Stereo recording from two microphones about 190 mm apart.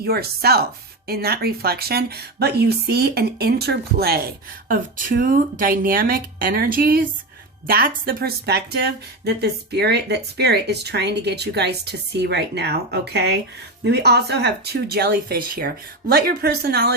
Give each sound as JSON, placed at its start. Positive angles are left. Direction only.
{"t": 0.0, "sound": "speech", "side_deg": -55}